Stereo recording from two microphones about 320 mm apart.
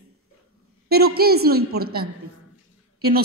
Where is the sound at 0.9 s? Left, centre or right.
Right.